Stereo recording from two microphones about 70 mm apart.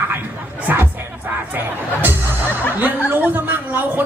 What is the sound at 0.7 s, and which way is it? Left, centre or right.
Crowd, right.